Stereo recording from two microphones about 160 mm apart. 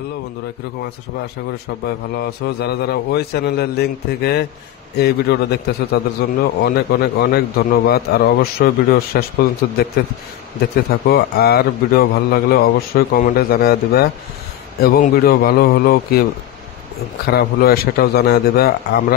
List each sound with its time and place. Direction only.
2.1 s a man's voice: 90° left; by 9.8 s 75° left (ahead or behind)
10.9 s a man's voice: 75° left (ahead or behind)
17.3 s a man's voice: 85° left